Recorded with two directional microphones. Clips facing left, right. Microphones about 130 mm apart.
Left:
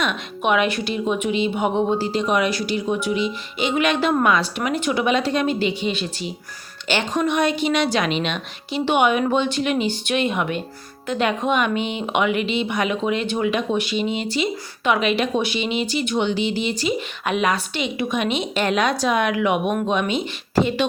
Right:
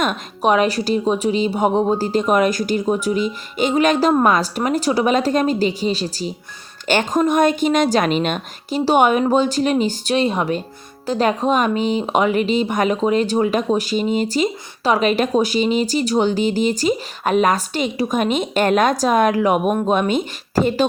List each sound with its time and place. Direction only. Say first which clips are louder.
0.0 s a woman's voice: right 4 dB; 40° right (ahead or behind)